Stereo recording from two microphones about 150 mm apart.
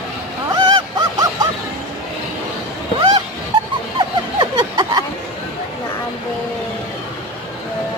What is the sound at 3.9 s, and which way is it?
Snicker, 25° right (ahead or behind).